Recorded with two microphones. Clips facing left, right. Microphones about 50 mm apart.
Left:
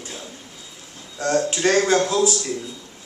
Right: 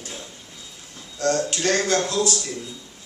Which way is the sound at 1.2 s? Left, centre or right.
Centre.